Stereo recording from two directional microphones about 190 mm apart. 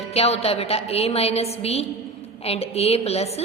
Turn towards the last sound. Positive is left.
turn(degrees=35)  # may be behind; listen again after turning